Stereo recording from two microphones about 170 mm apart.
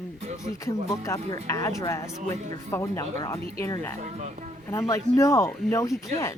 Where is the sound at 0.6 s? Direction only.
20° left (ahead or behind).